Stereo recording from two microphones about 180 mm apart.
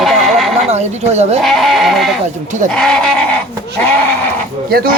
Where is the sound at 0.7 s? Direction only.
40° right (ahead or behind).